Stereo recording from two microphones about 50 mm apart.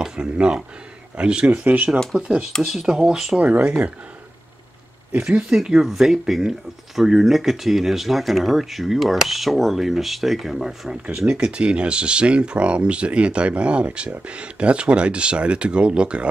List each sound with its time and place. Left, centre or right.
0.0 s speech: centre
1.5 s speech: right
2.1 s speech: centre
2.6 s speech: centre
5.2 s speech: centre